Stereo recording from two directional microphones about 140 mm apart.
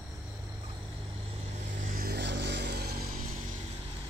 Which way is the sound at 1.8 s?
90° right.